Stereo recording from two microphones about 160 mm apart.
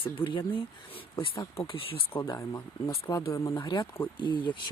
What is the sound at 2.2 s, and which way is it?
Speech, 20° left (ahead or behind).